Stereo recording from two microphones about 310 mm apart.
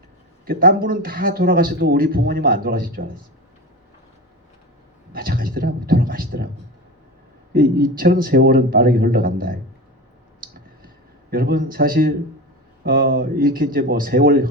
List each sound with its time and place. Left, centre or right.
0.4 s a man's voice: right
5.1 s a man's voice: right
7.5 s a man's voice: right
11.3 s a man's voice: right